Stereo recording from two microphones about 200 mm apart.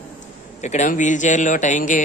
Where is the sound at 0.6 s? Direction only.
35° left (ahead or behind).